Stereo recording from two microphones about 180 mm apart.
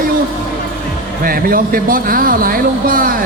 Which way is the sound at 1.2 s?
55° right (ahead or behind).